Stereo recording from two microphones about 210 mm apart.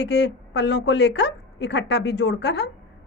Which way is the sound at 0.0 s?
55° left (ahead or behind).